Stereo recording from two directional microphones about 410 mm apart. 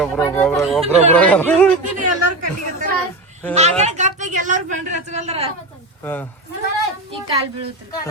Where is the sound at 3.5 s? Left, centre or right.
Centre.